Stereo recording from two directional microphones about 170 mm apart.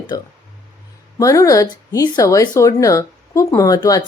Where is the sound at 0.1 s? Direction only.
20° left (ahead or behind).